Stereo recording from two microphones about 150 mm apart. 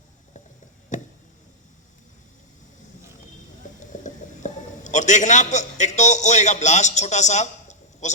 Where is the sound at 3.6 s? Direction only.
60° left (ahead or behind).